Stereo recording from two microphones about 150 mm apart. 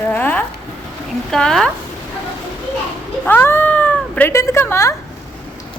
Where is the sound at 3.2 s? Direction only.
15° left (ahead or behind).